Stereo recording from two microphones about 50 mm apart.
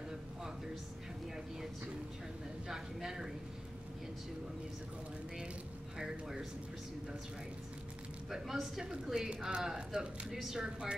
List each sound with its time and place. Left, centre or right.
2.7 s speech: centre
5.9 s speech: centre
8.3 s speech: centre